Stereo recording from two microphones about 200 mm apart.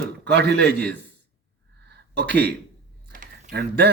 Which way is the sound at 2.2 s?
55° right (ahead or behind).